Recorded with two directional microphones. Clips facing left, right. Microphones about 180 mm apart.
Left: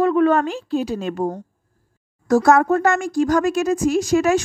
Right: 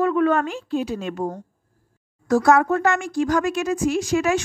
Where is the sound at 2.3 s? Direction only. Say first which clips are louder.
Left 2 dB; 45° left (ahead or behind).